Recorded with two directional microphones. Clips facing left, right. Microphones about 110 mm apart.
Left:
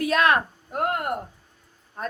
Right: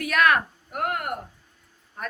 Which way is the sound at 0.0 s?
25° left (ahead or behind).